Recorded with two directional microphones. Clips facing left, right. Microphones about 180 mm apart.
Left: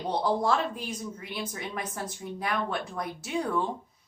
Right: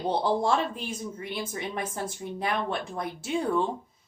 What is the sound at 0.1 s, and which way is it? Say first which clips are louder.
Speech: right 1 dB; 25° right (ahead or behind).